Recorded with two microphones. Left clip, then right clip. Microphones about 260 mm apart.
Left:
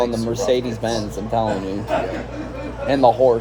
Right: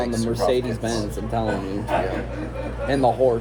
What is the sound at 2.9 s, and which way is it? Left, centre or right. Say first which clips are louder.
Speech: left 5 dB; left.